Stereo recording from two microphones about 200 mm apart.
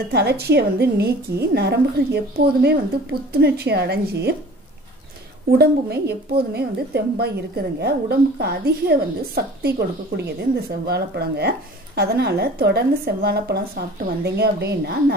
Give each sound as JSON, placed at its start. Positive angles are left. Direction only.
{"t": 0.1, "sound": "a woman's voice", "side_deg": -55}
{"t": 5.6, "sound": "a woman's voice", "side_deg": -55}